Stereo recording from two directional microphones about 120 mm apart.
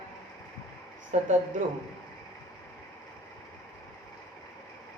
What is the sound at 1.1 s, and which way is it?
Speech, 80° right.